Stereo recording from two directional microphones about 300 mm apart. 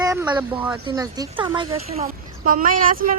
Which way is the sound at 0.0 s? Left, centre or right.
Centre.